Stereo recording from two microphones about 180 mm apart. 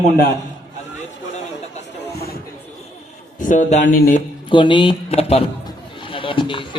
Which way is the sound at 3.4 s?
45° left (ahead or behind).